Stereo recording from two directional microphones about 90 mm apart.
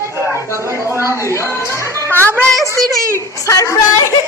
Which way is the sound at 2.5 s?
Centre (ahead or behind).